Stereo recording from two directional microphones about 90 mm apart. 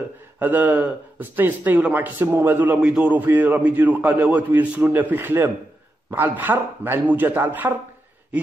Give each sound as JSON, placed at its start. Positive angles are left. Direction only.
{"t": 0.4, "sound": "a man's voice", "side_deg": -20}
{"t": 2.8, "sound": "a man's voice", "side_deg": -10}